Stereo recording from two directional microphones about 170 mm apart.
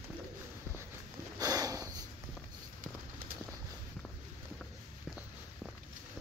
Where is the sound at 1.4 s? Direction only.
20° right (ahead or behind).